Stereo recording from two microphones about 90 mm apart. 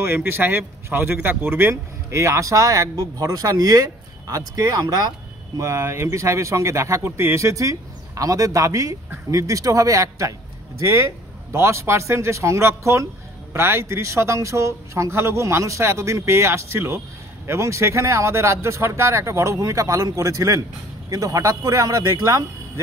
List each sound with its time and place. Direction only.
0.0 s speech: 25° right (ahead or behind); by 5.1 s 45° right (ahead or behind)
5.6 s speech: 30° right (ahead or behind)